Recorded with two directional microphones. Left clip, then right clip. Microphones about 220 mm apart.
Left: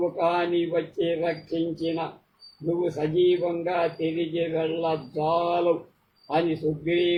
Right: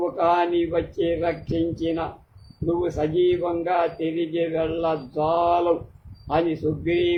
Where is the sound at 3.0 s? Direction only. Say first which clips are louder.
Even; 15° right (ahead or behind).